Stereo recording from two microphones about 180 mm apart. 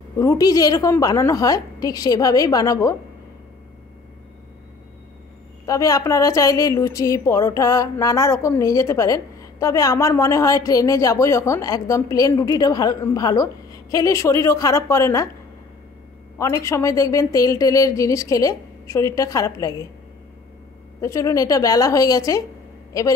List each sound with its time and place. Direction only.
0.2 s a woman's voice: 20° left (ahead or behind)
5.7 s a woman's voice: 20° left (ahead or behind)
16.3 s a woman's voice: 15° left (ahead or behind)
21.0 s a woman's voice: 15° left (ahead or behind)